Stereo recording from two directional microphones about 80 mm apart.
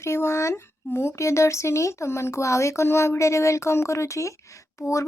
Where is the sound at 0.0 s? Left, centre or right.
Left.